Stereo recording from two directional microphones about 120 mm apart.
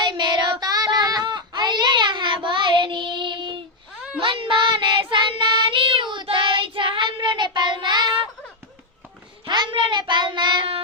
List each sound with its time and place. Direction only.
0.0 s child singing: 35° right (ahead or behind)
9.5 s child singing: 40° right (ahead or behind)